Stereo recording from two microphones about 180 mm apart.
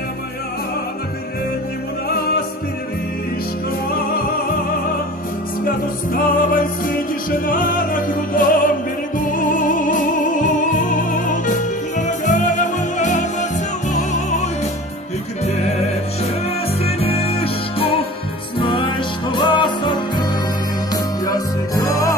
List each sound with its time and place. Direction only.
2.0 s music: 60° left (ahead or behind)
5.7 s music: 50° left (ahead or behind)
16.8 s music: 35° left (ahead or behind)